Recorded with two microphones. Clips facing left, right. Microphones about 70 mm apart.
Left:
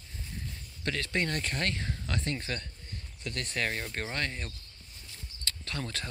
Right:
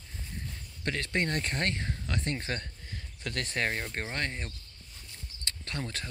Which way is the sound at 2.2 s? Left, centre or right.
Right.